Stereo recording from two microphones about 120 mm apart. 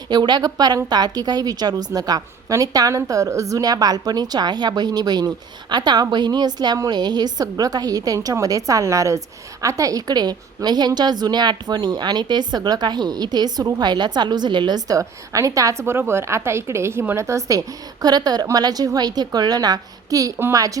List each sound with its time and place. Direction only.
0.1 s a woman's voice: 35° right (ahead or behind)